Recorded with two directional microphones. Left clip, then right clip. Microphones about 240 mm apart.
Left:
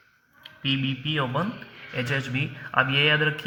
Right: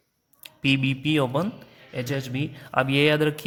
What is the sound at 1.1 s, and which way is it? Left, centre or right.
Speech, right.